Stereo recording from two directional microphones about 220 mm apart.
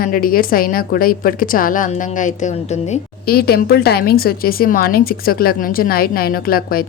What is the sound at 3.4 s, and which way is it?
A woman's voice, 45° left (ahead or behind).